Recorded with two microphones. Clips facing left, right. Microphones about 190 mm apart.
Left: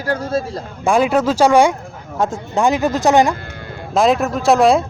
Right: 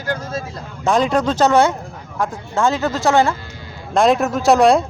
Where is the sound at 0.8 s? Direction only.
10° left (ahead or behind).